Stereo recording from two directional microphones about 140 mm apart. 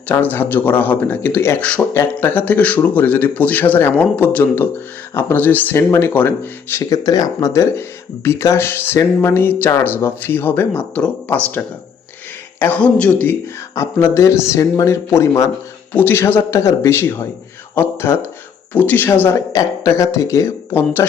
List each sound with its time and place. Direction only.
0.1 s speech: 15° left (ahead or behind)